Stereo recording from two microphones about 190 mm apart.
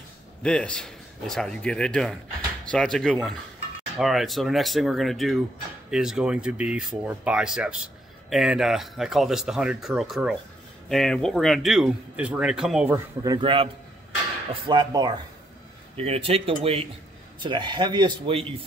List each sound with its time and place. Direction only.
0.4 s speech: 5° left (ahead or behind)
12.9 s a man's voice: 20° right (ahead or behind)